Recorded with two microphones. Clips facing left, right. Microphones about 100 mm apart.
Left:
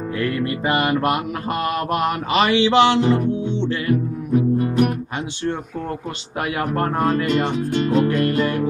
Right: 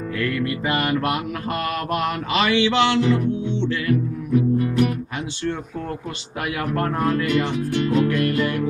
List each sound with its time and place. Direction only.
0.2 s mantra: 30° left (ahead or behind)
3.0 s music: 40° left (ahead or behind)
6.6 s music: 35° left (ahead or behind)